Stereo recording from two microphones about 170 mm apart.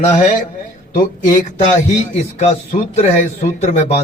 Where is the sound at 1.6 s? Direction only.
45° left (ahead or behind).